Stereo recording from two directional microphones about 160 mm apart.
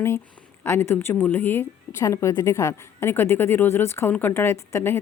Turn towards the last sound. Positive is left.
turn(degrees=15)  # may be behind; listen again after turning